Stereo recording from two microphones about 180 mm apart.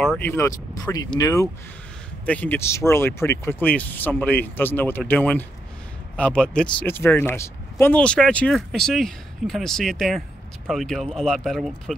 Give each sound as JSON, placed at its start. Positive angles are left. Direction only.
{"t": 0.2, "sound": "speech", "side_deg": 15}